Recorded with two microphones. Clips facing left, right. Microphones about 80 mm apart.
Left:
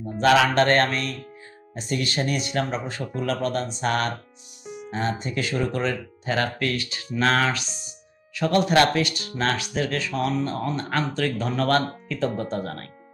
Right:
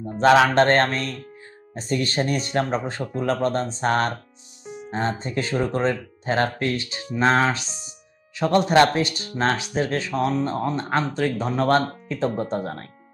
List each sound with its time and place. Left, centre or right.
0.0 s speech: right